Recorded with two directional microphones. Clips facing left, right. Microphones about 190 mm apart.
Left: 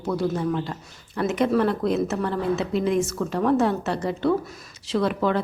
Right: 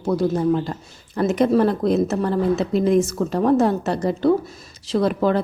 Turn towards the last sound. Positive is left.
turn(degrees=-40)  # may be behind; listen again after turning